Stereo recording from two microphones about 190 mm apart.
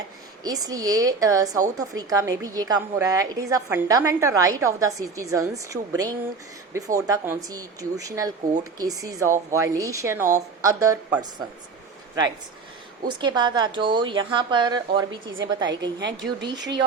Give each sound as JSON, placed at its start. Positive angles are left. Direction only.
{"t": 0.4, "sound": "a woman's voice", "side_deg": -20}
{"t": 13.1, "sound": "speech", "side_deg": -25}
{"t": 16.0, "sound": "speech", "side_deg": -70}